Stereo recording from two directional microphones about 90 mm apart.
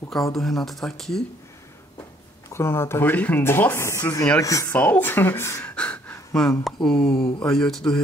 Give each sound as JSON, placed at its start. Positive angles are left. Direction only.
{"t": 0.1, "sound": "speech", "side_deg": 5}
{"t": 2.5, "sound": "speech", "side_deg": 30}
{"t": 4.6, "sound": "speech", "side_deg": 20}
{"t": 5.6, "sound": "gasp", "side_deg": 15}
{"t": 6.6, "sound": "speech", "side_deg": 5}